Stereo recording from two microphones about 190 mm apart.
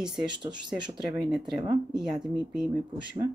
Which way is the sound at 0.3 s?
25° right (ahead or behind).